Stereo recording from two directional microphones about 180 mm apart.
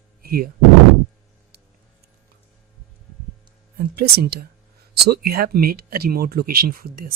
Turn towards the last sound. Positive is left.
turn(degrees=-55)  # may be behind; listen again after turning